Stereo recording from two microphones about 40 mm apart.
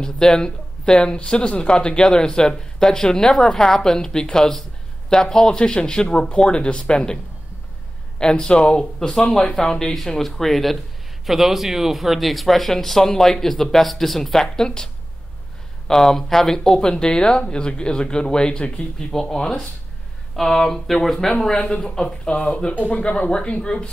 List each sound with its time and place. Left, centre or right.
0.0 s speech: centre
8.2 s speech: left
9.1 s speech: centre
9.4 s speech: centre
11.2 s speech: centre
15.9 s speech: centre
20.3 s speech: centre